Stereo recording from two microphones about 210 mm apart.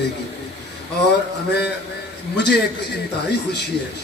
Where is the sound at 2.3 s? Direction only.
55° left (ahead or behind).